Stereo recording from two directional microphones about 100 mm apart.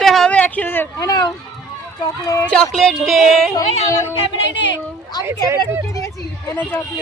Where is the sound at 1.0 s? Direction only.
40° left (ahead or behind).